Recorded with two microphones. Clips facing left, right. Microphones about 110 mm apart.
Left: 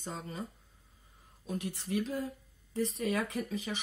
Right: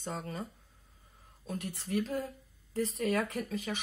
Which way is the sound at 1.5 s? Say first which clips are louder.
Left 1 dB; 5° left (ahead or behind).